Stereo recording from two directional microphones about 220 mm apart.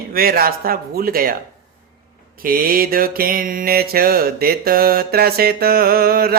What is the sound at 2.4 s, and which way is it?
Mantra, 40° right (ahead or behind).